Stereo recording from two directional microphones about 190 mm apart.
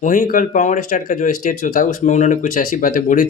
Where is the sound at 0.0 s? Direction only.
45° left (ahead or behind).